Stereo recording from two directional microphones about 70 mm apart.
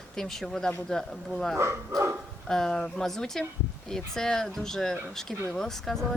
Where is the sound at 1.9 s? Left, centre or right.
Right.